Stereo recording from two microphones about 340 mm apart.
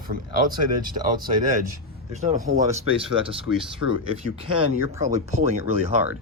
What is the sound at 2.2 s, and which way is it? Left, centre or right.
Speech, centre.